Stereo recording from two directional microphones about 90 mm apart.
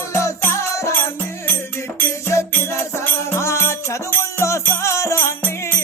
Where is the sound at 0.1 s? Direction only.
35° left (ahead or behind).